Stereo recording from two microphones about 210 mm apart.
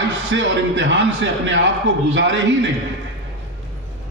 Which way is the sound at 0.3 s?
60° right (ahead or behind).